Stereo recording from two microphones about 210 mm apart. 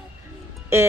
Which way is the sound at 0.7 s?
10° right (ahead or behind).